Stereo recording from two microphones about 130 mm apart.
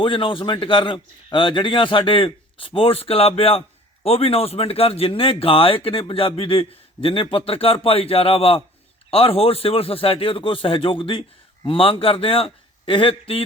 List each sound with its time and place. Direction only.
0.0 s a man's voice: 40° left (ahead or behind)